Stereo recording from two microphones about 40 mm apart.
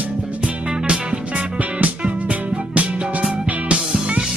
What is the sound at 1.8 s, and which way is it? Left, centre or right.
Music, right.